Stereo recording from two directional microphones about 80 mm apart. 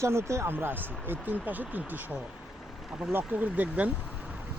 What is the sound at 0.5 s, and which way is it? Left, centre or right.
Speech, right.